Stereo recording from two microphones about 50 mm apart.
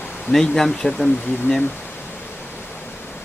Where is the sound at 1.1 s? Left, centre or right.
Left.